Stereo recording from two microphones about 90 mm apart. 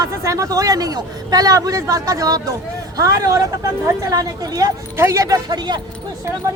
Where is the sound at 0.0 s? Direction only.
35° right (ahead or behind).